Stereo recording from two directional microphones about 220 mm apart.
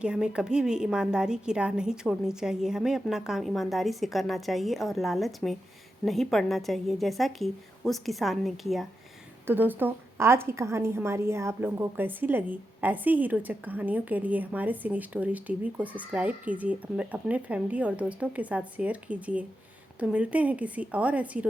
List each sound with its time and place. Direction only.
0.0 s a woman's voice: 5° right (ahead or behind)